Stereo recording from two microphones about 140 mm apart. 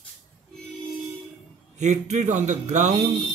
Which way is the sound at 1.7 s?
55° right (ahead or behind).